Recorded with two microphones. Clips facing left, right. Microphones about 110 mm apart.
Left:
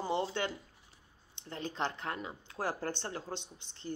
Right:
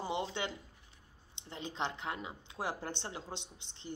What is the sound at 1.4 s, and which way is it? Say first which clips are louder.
Speech: left 2 dB; 20° right (ahead or behind).